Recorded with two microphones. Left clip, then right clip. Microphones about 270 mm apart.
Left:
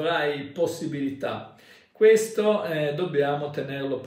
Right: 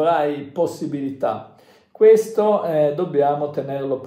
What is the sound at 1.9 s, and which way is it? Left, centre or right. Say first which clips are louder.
Speech: right 5 dB; centre.